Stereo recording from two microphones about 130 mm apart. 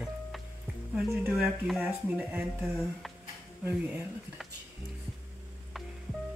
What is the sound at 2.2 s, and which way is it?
Speech, 15° right (ahead or behind).